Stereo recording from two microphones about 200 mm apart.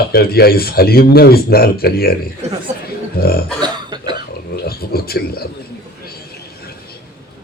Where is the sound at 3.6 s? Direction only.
20° right (ahead or behind).